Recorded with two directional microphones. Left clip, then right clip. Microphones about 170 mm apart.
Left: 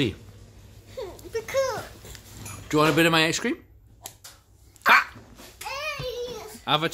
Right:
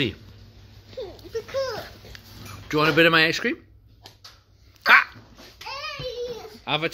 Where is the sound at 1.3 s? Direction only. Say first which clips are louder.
Left 2 dB; 20° left (ahead or behind).